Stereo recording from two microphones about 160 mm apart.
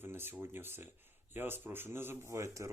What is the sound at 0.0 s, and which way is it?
Speech, 15° right (ahead or behind).